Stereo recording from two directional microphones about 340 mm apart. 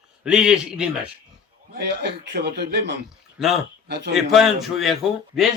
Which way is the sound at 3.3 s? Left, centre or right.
Centre.